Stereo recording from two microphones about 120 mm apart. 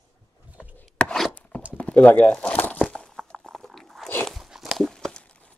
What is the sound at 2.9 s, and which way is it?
Crunch, 10° left (ahead or behind).